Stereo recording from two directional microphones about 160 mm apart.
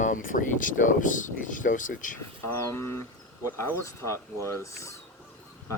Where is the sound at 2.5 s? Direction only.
15° left (ahead or behind).